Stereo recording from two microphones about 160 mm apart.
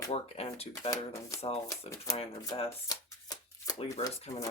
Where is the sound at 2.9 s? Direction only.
20° left (ahead or behind).